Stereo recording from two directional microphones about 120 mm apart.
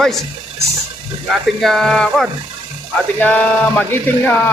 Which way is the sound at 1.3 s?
Centre (ahead or behind).